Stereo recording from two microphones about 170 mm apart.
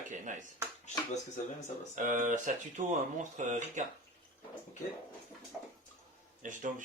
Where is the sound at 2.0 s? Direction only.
50° right (ahead or behind).